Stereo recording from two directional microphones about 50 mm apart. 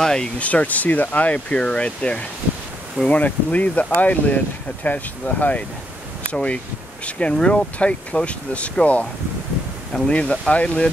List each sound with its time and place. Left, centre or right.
0.0 s a sound: centre
0.4 s speech: left
10.0 s speech: left